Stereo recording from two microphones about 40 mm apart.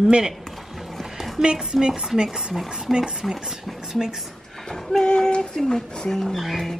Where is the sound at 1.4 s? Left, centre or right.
Centre.